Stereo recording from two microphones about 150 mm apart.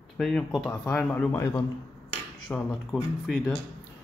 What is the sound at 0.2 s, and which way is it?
Speech, centre (ahead or behind).